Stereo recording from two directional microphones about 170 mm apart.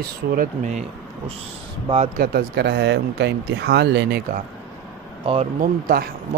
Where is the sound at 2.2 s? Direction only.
65° right (ahead or behind).